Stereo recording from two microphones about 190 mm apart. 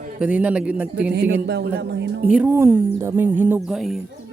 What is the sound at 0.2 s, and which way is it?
Speech, 5° right (ahead or behind).